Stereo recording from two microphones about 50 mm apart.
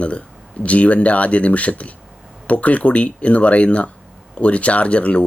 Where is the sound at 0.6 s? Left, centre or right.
Left.